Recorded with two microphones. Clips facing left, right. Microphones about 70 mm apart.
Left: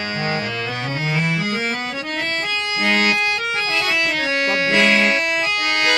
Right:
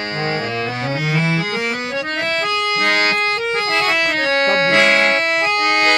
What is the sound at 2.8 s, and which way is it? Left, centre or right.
Accordion, right.